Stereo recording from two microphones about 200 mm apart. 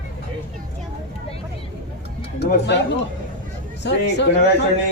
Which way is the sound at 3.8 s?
60° left (ahead or behind).